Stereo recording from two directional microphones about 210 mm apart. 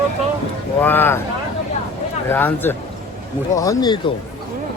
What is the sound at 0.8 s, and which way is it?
Speech, 10° left (ahead or behind).